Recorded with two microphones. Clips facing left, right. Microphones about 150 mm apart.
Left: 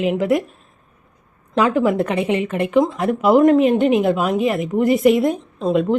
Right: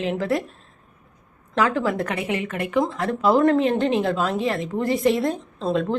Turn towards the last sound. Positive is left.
turn(degrees=20)  # may be behind; listen again after turning